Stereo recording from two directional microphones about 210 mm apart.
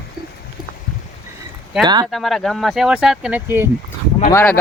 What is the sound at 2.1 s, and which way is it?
Speech, centre (ahead or behind).